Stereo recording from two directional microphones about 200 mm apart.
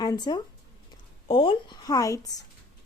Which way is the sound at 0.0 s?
20° left (ahead or behind).